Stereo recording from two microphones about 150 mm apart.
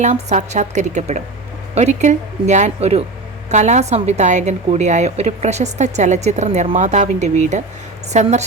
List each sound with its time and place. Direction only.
0.0 s a woman's voice: 50° right (ahead or behind)